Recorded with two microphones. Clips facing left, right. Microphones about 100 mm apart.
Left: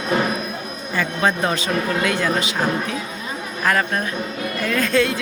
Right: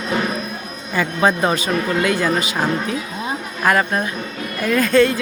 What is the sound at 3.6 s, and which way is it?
Speech, 15° right (ahead or behind).